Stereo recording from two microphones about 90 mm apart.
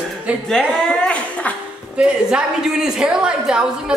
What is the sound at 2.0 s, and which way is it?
A woman's voice, 10° right (ahead or behind).